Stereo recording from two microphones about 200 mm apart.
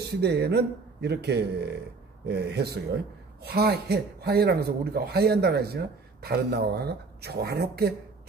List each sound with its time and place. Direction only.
0.0 s a man's voice: 55° right (ahead or behind)